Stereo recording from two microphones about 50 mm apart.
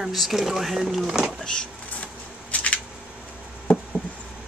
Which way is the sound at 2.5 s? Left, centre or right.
Left.